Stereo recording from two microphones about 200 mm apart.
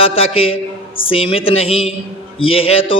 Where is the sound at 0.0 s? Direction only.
30° left (ahead or behind).